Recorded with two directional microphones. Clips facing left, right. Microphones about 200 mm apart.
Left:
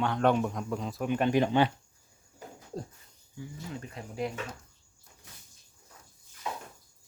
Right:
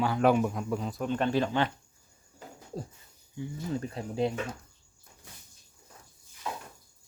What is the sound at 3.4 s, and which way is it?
Speech, 20° right (ahead or behind).